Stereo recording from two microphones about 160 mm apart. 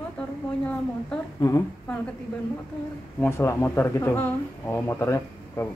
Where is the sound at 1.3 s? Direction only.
20° left (ahead or behind).